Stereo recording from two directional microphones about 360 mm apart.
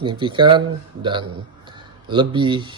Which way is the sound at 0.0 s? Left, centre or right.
Centre.